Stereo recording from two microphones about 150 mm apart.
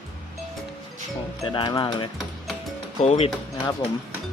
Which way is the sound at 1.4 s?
35° left (ahead or behind).